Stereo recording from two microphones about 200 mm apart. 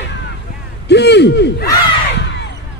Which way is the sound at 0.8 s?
60° left (ahead or behind).